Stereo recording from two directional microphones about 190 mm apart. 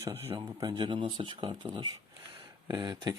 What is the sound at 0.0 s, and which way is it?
Speech, 15° right (ahead or behind).